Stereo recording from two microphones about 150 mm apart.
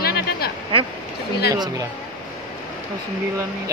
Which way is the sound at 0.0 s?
90° left.